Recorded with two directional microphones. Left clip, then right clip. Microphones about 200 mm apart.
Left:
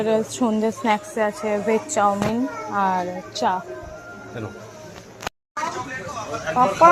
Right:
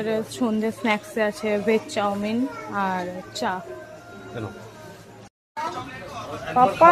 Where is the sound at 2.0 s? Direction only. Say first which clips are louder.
Left 5 dB; 10° right (ahead or behind).